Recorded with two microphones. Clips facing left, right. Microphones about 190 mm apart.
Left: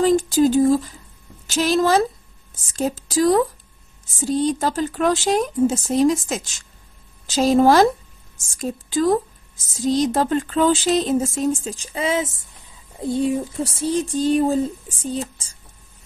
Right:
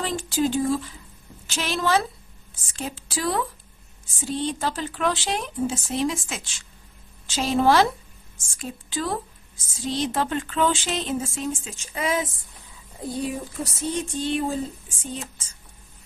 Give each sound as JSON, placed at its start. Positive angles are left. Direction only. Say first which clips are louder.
{"t": 0.0, "sound": "speech", "louder": "left 9 dB", "side_deg": 40}